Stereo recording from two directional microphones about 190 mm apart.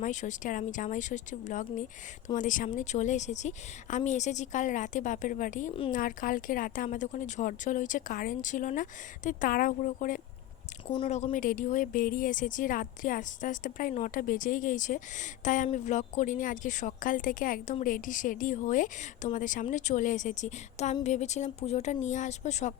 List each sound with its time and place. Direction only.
0.0 s speech: 40° left (ahead or behind)